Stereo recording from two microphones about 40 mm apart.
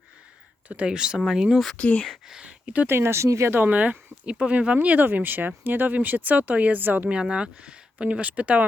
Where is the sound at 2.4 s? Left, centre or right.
Right.